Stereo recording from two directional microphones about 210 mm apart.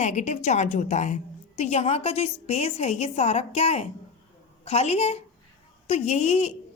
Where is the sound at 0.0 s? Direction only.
35° left (ahead or behind).